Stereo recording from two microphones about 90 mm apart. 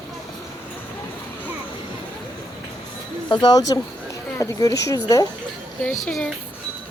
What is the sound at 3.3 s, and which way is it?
Speech, 50° left (ahead or behind).